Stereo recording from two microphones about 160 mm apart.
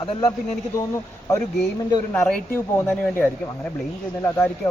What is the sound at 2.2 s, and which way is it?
Speech, 10° left (ahead or behind).